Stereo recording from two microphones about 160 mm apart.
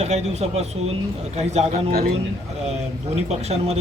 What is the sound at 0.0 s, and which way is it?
A man's voice, 40° right (ahead or behind).